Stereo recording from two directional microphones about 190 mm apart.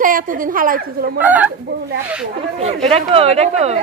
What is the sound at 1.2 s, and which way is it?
Speech, 10° right (ahead or behind).